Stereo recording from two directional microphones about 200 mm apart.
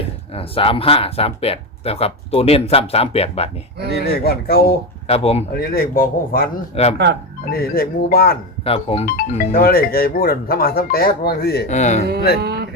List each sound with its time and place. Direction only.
0.3 s speech: 30° left (ahead or behind)
3.8 s speech: 50° left (ahead or behind)
5.0 s speech: 30° left (ahead or behind)
5.5 s speech: 50° left (ahead or behind)
6.7 s speech: 30° left (ahead or behind)
7.5 s speech: 50° left (ahead or behind)
8.6 s speech: 30° left (ahead or behind)
9.0 s speech: 45° left (ahead or behind)
11.7 s speech: 35° left (ahead or behind)
12.4 s speech: 55° right (ahead or behind)